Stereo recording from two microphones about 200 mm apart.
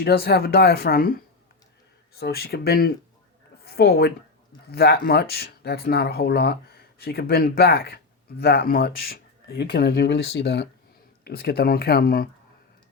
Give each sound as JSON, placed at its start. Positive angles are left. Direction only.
{"t": 0.0, "sound": "a woman's voice", "side_deg": 50}